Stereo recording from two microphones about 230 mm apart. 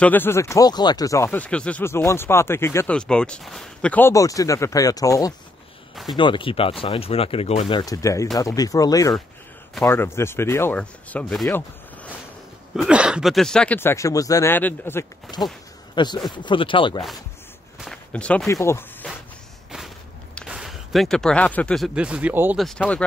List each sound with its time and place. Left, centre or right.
0.0 s speech: centre
17.7 s speech: centre
20.3 s speech: centre